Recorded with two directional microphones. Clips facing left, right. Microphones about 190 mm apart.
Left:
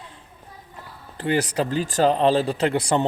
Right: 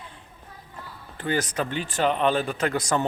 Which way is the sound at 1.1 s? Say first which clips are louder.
Left 4 dB; 30° left (ahead or behind).